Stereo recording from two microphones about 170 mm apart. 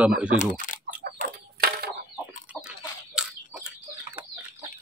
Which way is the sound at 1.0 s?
70° right (ahead or behind).